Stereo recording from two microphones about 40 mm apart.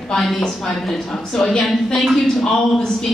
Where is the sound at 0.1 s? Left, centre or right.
Centre.